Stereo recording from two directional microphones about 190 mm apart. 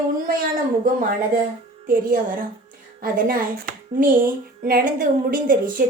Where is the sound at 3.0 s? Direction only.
50° right (ahead or behind).